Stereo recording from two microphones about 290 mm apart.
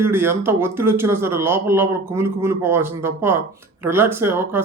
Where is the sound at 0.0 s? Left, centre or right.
Centre.